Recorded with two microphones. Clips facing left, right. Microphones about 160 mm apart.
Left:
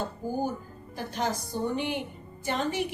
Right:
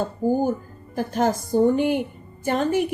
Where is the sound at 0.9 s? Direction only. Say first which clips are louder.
Right 9 dB; 45° right (ahead or behind).